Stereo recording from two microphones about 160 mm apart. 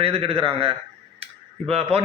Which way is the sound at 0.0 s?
35° right (ahead or behind).